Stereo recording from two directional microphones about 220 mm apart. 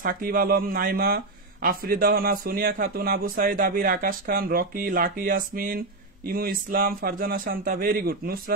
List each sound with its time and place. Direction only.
0.0 s speech: 40° right (ahead or behind)